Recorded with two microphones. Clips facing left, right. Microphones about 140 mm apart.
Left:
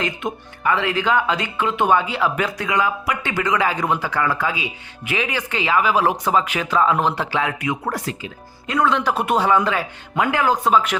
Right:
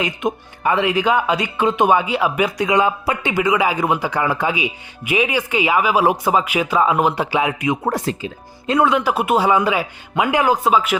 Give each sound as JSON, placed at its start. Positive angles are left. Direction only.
{"t": 0.0, "sound": "speech", "side_deg": -15}
{"t": 3.3, "sound": "speech", "side_deg": -10}
{"t": 8.9, "sound": "speech", "side_deg": -10}